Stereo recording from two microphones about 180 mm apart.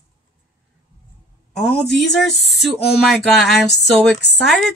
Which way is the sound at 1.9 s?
Centre (ahead or behind).